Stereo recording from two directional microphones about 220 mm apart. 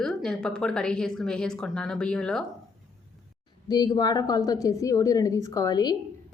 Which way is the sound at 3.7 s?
20° left (ahead or behind).